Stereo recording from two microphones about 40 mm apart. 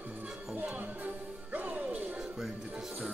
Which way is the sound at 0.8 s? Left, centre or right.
Right.